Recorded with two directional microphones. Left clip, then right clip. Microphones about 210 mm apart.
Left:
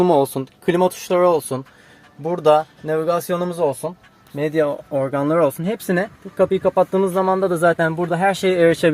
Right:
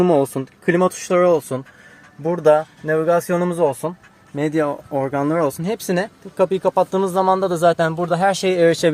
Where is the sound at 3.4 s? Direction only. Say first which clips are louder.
Right 2 dB; 10° right (ahead or behind).